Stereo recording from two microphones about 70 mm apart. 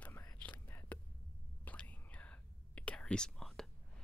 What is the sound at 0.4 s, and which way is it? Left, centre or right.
Whispering, left.